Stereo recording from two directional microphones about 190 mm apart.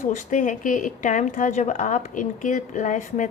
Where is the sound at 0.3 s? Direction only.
45° left (ahead or behind).